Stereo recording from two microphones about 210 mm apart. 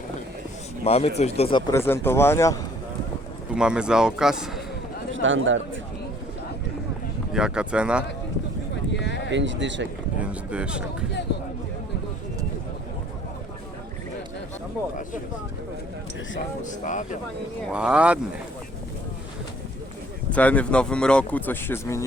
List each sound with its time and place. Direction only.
0.9 s speech: 30° left (ahead or behind)
1.7 s speech: 10° left (ahead or behind)
3.5 s a man's voice: 5° right (ahead or behind)
5.1 s a man's voice: 65° right (ahead or behind)
7.3 s a man's voice: 5° right (ahead or behind)
8.9 s speech: 55° left (ahead or behind)
9.3 s a man's voice: 60° right (ahead or behind)
10.2 s a man's voice: 5° right (ahead or behind)
16.6 s speech: 35° left (ahead or behind)
17.7 s a man's voice: 5° right (ahead or behind)
20.3 s speech: 5° left (ahead or behind)